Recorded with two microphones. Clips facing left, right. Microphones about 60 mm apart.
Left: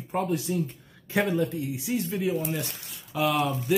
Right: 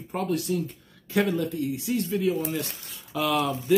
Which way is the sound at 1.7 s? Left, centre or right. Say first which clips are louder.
Right 2 dB; centre.